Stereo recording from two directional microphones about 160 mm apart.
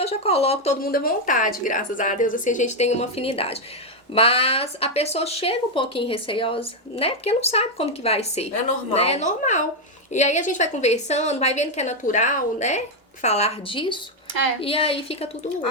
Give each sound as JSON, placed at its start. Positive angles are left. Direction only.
{"t": 0.0, "sound": "speech", "side_deg": 40}
{"t": 0.8, "sound": "a woman's voice", "side_deg": 65}